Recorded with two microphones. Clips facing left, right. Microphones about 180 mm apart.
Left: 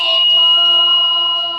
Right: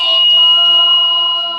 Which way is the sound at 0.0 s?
10° left (ahead or behind).